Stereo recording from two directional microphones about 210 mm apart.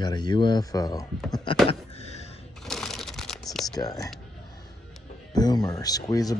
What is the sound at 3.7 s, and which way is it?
Speech, 15° left (ahead or behind).